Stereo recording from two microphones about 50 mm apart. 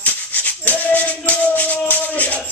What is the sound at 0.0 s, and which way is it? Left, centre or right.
Maraca, left.